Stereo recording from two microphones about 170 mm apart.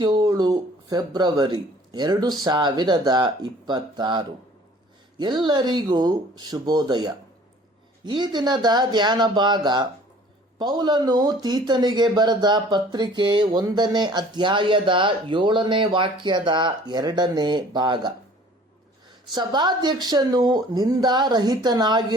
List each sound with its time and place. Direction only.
0.0 s speech: 25° right (ahead or behind)
19.3 s speech: 25° right (ahead or behind)